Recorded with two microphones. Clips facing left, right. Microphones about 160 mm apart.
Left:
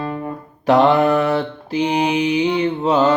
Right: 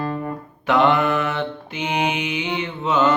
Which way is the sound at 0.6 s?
35° left (ahead or behind).